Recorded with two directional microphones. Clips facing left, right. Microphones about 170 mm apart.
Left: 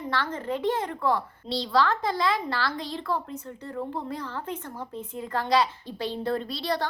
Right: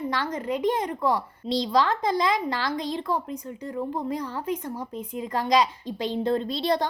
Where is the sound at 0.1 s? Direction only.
15° right (ahead or behind).